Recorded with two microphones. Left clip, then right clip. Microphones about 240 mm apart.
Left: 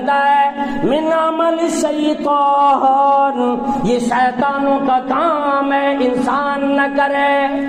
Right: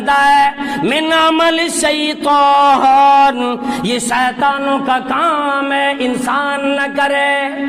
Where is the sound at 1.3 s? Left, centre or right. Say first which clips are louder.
Right 3 dB; right.